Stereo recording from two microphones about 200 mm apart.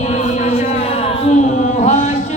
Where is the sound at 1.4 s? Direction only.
35° left (ahead or behind).